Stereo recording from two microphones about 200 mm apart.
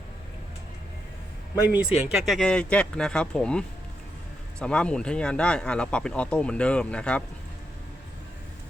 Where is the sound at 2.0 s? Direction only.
Centre (ahead or behind).